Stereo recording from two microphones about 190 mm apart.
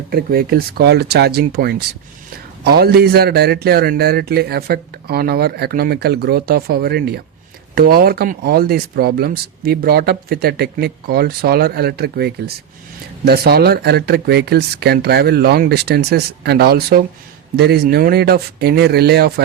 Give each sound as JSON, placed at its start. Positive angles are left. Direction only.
{"t": 0.1, "sound": "speech", "side_deg": -55}